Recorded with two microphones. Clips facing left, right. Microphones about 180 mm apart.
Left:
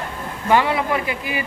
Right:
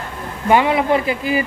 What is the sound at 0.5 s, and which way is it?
Speech, 20° right (ahead or behind).